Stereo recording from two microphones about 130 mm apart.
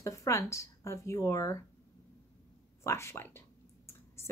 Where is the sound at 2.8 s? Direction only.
20° left (ahead or behind).